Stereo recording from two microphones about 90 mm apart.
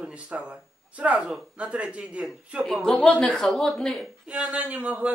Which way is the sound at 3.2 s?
10° left (ahead or behind).